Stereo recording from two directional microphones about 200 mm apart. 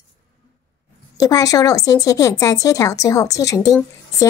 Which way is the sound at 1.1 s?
20° left (ahead or behind).